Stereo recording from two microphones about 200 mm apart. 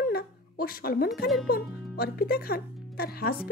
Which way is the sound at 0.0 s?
50° left (ahead or behind).